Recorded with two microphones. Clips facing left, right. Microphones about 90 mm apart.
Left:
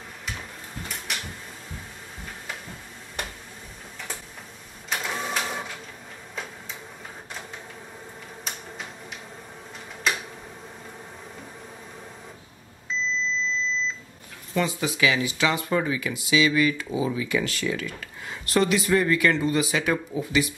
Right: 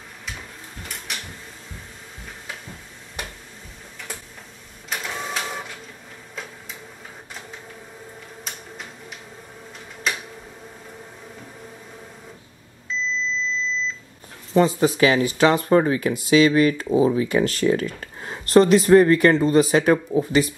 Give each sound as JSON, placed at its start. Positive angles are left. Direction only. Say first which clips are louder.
{"t": 1.1, "sound": "a sound", "louder": "even", "side_deg": 0}
{"t": 4.8, "sound": "printer", "louder": "even", "side_deg": 0}
{"t": 14.5, "sound": "speech", "louder": "right 8 dB", "side_deg": -35}